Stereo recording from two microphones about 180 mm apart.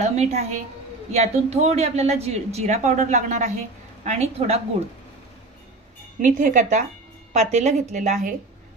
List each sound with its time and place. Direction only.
0.0 s a woman's voice: 40° right (ahead or behind)
6.2 s a woman's voice: 45° right (ahead or behind)